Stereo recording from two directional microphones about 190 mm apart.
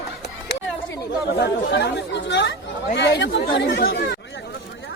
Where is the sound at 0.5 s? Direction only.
60° left (ahead or behind).